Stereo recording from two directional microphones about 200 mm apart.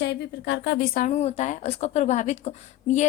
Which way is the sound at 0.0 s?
60° left (ahead or behind).